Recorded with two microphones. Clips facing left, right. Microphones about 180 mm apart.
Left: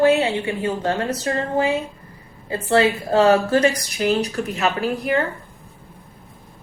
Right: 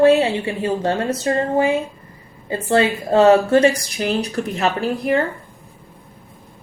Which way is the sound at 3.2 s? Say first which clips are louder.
Right 4 dB; 30° right (ahead or behind).